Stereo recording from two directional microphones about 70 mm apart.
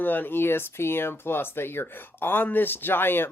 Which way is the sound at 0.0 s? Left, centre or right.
Left.